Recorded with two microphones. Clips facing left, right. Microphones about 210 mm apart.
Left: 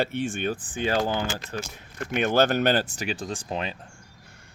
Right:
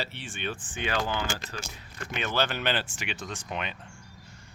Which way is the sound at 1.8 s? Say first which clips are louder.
Left 9 dB; 50° left (ahead or behind).